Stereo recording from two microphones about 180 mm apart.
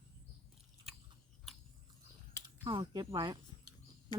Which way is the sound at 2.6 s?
25° right (ahead or behind).